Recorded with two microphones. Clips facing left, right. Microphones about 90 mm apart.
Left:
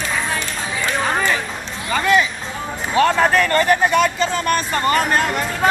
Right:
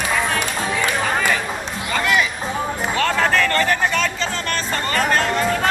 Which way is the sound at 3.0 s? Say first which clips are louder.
Left 4 dB; 15° left (ahead or behind).